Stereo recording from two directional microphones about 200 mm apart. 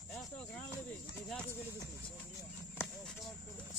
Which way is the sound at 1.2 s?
5° left (ahead or behind).